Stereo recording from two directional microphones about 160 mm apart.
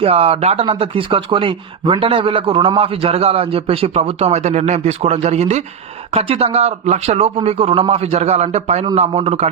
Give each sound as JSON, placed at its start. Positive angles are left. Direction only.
{"t": 0.0, "sound": "speech", "side_deg": -35}